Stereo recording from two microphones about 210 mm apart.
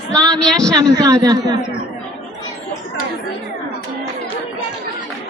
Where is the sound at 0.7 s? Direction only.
15° right (ahead or behind).